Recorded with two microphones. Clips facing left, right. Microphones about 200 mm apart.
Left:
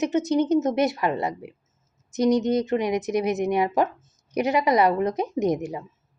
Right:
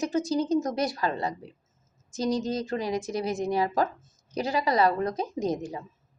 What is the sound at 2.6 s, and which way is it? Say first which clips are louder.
Speech: left 5 dB; 20° left (ahead or behind).